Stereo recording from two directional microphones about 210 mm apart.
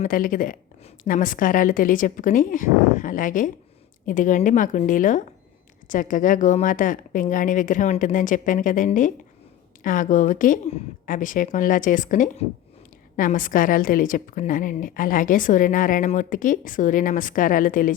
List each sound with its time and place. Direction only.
0.0 s a woman's voice: 40° left (ahead or behind)